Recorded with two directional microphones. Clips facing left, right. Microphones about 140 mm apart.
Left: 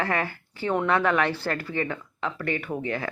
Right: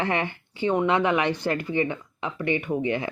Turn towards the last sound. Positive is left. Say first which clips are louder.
# right 4 dB
turn(degrees=-15)  # may be behind; listen again after turning